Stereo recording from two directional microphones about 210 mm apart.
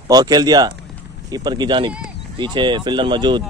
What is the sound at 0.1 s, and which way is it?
Speech, 20° right (ahead or behind).